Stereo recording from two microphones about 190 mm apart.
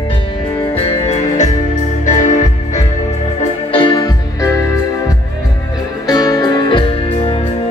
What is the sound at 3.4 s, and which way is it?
Organ, 30° left (ahead or behind).